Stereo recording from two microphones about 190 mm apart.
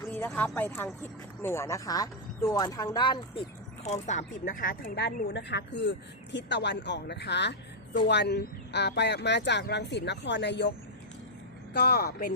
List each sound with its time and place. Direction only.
0.1 s speech: 10° left (ahead or behind)
3.8 s speech: 35° left (ahead or behind)
5.3 s speech: 65° left (ahead or behind)
11.7 s speech: 55° left (ahead or behind)